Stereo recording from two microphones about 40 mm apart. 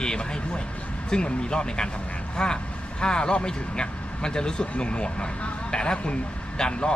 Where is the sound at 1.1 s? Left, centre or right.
Left.